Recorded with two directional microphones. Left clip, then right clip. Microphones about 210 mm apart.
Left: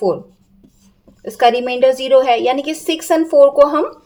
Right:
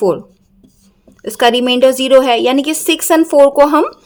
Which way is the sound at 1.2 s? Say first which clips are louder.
Right 2 dB; 30° right (ahead or behind).